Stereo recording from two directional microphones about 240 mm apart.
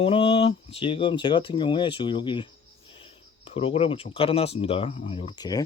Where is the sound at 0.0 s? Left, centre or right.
Left.